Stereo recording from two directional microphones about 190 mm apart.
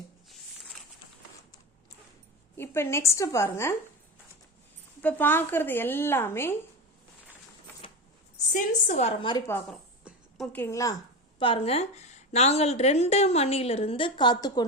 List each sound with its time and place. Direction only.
2.6 s a woman's voice: 10° left (ahead or behind)
5.0 s a woman's voice: 10° left (ahead or behind)
8.4 s a woman's voice: 40° left (ahead or behind)
9.5 s a woman's voice: 10° left (ahead or behind)
10.0 s a sound: centre (ahead or behind)
11.3 s a woman's voice: 30° left (ahead or behind)